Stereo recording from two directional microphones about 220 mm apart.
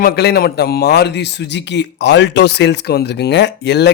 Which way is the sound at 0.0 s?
45° left (ahead or behind).